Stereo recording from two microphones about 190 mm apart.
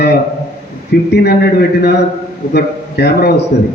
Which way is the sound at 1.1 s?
60° left (ahead or behind).